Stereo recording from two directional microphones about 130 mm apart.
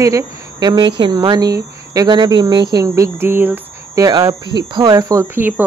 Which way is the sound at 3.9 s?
25° right (ahead or behind).